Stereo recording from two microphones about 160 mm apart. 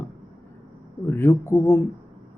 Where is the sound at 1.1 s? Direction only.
15° left (ahead or behind).